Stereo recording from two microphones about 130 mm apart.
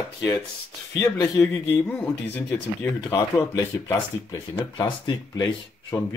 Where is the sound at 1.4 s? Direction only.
10° left (ahead or behind).